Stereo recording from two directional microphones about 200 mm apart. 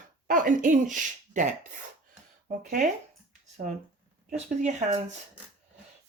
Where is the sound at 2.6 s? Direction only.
40° right (ahead or behind).